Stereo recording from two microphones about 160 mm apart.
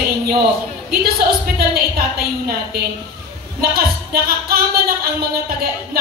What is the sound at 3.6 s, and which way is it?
A woman's voice, 70° right (ahead or behind).